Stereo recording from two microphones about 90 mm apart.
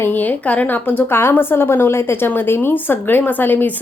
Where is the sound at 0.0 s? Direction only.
20° left (ahead or behind).